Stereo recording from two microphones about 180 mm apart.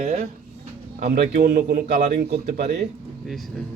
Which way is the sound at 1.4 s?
65° right (ahead or behind).